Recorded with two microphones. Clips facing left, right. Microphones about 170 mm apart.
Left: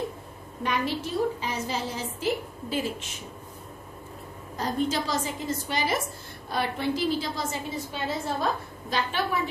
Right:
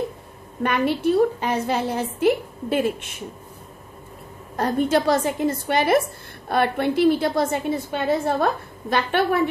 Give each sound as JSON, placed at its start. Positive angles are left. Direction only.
{"t": 0.6, "sound": "a woman's voice", "side_deg": -60}
{"t": 4.6, "sound": "a woman's voice", "side_deg": -60}